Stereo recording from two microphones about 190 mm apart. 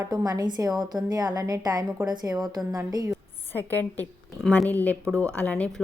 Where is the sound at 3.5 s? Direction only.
10° left (ahead or behind).